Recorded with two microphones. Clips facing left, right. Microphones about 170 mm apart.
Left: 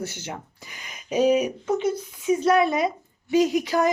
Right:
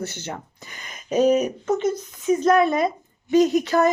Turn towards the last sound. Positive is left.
turn(degrees=10)  # may be behind; listen again after turning